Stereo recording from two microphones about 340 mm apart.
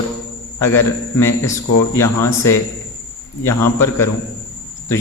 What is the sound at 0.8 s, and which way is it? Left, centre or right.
A man's voice, centre.